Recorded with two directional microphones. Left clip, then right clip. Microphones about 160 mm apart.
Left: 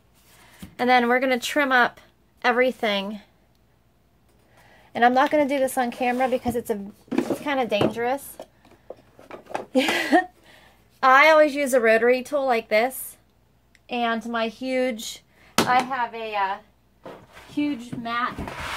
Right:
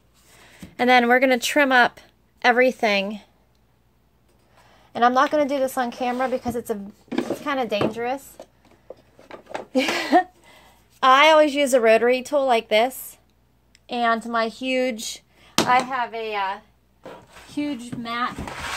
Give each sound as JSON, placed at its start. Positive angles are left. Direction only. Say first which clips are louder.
{"t": 0.3, "sound": "speech", "louder": "right 2 dB", "side_deg": -35}
{"t": 4.6, "sound": "a woman's voice", "louder": "even", "side_deg": 0}
{"t": 7.1, "sound": "a sound", "louder": "left 1 dB", "side_deg": 15}
{"t": 7.4, "sound": "speech", "louder": "even", "side_deg": -5}
{"t": 9.7, "sound": "a sound", "louder": "even", "side_deg": -5}
{"t": 11.0, "sound": "a woman's voice", "louder": "right 1 dB", "side_deg": -40}
{"t": 13.8, "sound": "a woman's voice", "louder": "right 3 dB", "side_deg": -55}
{"t": 14.6, "sound": "speech", "louder": "right 1 dB", "side_deg": -35}
{"t": 15.7, "sound": "speech", "louder": "right 3 dB", "side_deg": -60}
{"t": 17.0, "sound": "a sound", "louder": "right 1 dB", "side_deg": -65}